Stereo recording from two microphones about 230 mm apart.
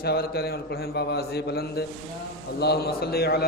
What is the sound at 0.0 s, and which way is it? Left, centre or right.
A man's voice, left.